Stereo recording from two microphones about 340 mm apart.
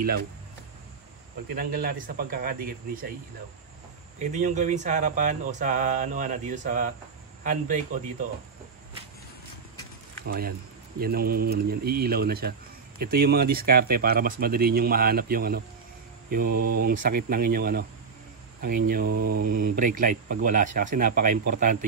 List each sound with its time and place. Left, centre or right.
1.5 s speech: right
4.2 s speech: right
10.2 s speech: right